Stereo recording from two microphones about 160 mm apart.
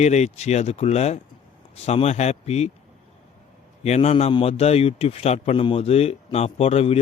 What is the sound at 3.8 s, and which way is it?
A man's voice, 45° left (ahead or behind).